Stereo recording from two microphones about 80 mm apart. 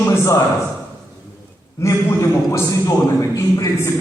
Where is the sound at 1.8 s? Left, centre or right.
Left.